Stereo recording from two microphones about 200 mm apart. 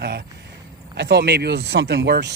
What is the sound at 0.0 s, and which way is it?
Speech, 55° right (ahead or behind).